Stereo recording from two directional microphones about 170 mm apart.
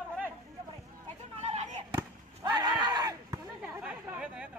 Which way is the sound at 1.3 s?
40° right (ahead or behind).